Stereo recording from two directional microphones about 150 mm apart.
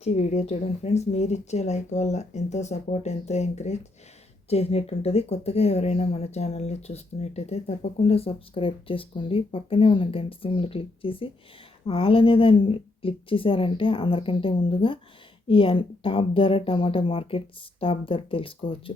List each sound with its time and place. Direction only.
0.0 s speech: 50° left (ahead or behind)